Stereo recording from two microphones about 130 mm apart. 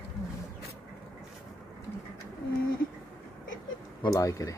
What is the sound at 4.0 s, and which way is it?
Speech, 25° left (ahead or behind).